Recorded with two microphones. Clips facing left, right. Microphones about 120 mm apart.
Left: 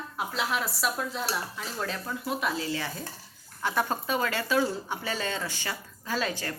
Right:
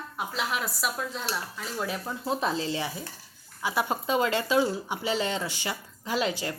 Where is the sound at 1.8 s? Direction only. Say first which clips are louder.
Right 3 dB; 20° right (ahead or behind).